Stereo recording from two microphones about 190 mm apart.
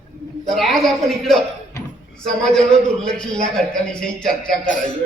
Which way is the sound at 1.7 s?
15° left (ahead or behind).